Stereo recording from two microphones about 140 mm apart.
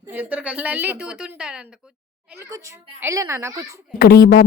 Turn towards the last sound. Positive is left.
turn(degrees=90)